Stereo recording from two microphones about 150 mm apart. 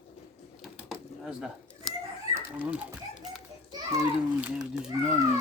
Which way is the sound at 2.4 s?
10° right (ahead or behind).